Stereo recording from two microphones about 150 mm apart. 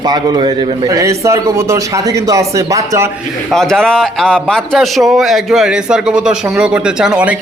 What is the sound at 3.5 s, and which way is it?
A man's voice, 5° left (ahead or behind).